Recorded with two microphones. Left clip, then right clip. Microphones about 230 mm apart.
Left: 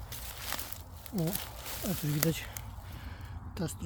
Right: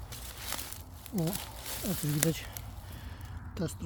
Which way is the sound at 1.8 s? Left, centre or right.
Centre.